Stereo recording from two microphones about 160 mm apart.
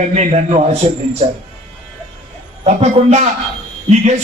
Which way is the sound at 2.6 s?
45° right (ahead or behind).